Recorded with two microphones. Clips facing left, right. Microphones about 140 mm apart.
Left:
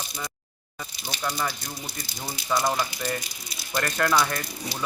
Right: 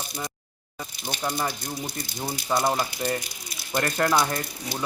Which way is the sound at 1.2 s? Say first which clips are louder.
Right 1 dB; 20° right (ahead or behind).